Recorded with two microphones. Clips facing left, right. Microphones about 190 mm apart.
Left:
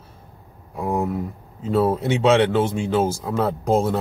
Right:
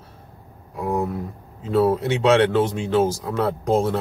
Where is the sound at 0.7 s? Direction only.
20° left (ahead or behind).